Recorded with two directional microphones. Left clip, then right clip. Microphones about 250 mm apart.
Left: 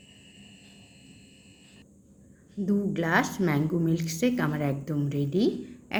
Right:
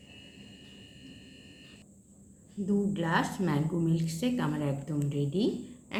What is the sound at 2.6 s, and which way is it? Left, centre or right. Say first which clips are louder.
A woman's voice: left 3 dB; left.